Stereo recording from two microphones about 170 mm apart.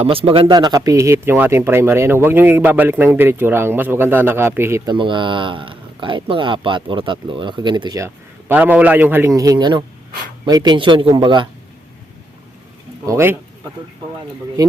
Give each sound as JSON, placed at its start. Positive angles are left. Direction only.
{"t": 0.0, "sound": "speech", "side_deg": -35}
{"t": 4.9, "sound": "speech", "side_deg": -30}
{"t": 13.1, "sound": "speech", "side_deg": -15}
{"t": 14.6, "sound": "speech", "side_deg": -20}